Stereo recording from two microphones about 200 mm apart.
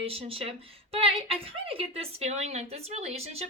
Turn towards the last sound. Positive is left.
turn(degrees=-30)  # may be behind; listen again after turning